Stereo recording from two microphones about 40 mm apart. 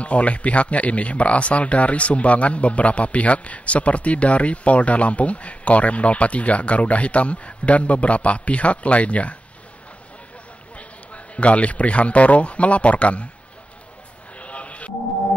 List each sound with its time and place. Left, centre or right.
0.0 s speech: left
10.8 s a man's voice: left
14.4 s a sound: left